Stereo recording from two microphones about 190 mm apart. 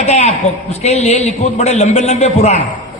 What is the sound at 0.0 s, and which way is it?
A man's voice, 35° left (ahead or behind).